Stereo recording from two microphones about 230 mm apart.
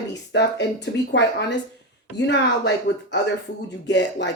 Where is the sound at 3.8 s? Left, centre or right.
Left.